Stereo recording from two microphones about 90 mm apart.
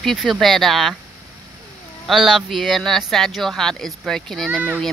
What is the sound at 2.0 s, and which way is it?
Speech, 5° right (ahead or behind).